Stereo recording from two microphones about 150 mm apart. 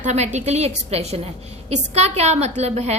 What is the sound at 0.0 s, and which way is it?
A woman's voice, 50° right (ahead or behind).